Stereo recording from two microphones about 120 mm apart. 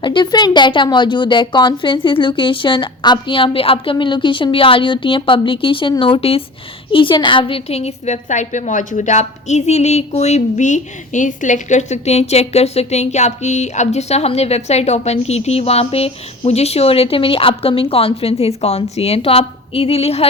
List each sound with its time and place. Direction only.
0.0 s a woman's voice: 40° left (ahead or behind); by 20.2 s 55° left (ahead or behind)